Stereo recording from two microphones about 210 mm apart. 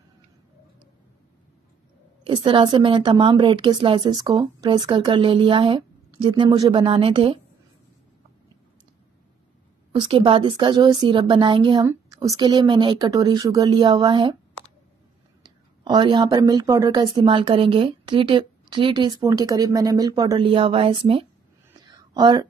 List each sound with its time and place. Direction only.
2.2 s a woman's voice: 25° right (ahead or behind)
9.9 s a woman's voice: 25° right (ahead or behind)
15.4 s a woman's voice: 20° right (ahead or behind)